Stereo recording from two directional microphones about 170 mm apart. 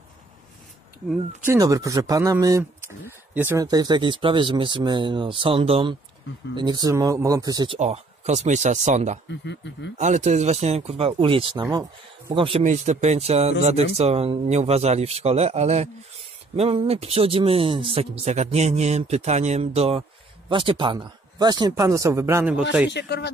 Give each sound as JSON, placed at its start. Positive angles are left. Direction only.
{"t": 1.4, "sound": "speech", "side_deg": -15}
{"t": 9.3, "sound": "speech", "side_deg": 90}
{"t": 9.9, "sound": "speech", "side_deg": -45}
{"t": 12.6, "sound": "a man's voice", "side_deg": -40}
{"t": 22.8, "sound": "speech", "side_deg": 80}